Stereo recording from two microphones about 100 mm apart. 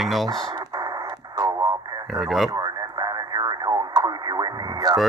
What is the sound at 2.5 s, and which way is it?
Radio, 45° right (ahead or behind).